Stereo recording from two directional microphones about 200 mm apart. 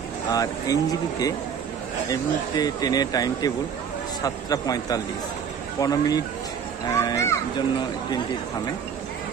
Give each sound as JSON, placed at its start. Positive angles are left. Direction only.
{"t": 0.3, "sound": "a child's voice", "side_deg": 20}
{"t": 2.5, "sound": "a child's voice", "side_deg": 20}